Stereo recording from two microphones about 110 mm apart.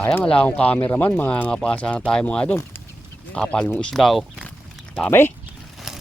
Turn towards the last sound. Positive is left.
turn(degrees=-5)  # may be behind; listen again after turning